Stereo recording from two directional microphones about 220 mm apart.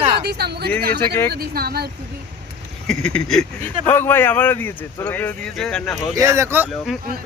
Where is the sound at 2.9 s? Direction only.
5° left (ahead or behind).